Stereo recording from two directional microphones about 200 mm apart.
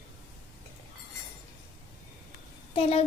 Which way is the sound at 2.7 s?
30° left (ahead or behind).